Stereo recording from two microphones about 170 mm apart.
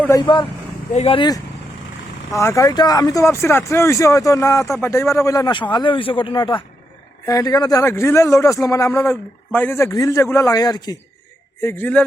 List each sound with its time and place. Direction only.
0.9 s speech: 30° left (ahead or behind)
2.3 s a man's voice: 20° left (ahead or behind)
11.6 s a man's voice: 10° left (ahead or behind)